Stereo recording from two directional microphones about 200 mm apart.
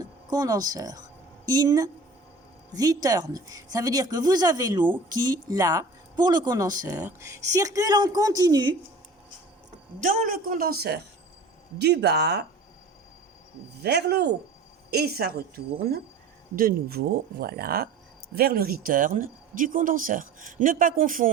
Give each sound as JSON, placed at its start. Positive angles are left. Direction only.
{"t": 0.0, "sound": "speech", "side_deg": -20}
{"t": 10.0, "sound": "a woman's voice", "side_deg": -40}
{"t": 13.8, "sound": "speech", "side_deg": -55}